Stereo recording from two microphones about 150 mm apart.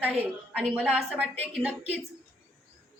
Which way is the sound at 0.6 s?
5° left (ahead or behind).